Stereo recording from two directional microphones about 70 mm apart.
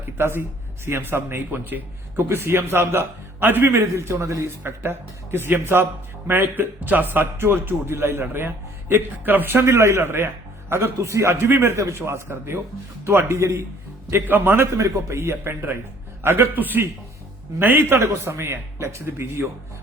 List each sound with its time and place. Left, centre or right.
0.2 s a man's voice: right
3.8 s a man's voice: right
4.4 s a man's voice: right
14.1 s a man's voice: right
14.7 s a man's voice: right